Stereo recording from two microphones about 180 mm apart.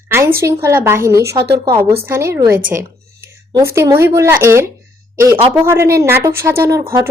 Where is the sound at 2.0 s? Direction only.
15° right (ahead or behind).